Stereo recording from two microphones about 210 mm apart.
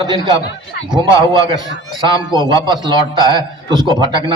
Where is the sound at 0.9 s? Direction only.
20° right (ahead or behind).